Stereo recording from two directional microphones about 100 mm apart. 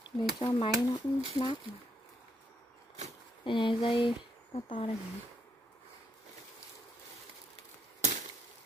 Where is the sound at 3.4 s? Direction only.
55° left (ahead or behind).